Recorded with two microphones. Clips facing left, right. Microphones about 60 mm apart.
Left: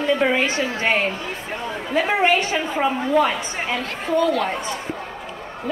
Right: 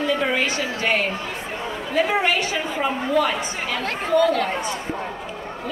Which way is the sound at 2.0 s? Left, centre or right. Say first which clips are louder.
Left 4 dB; left.